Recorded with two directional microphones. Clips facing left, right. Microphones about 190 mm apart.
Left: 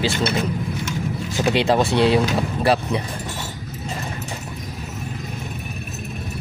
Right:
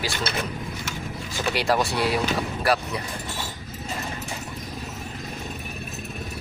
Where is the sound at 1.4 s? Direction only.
25° left (ahead or behind).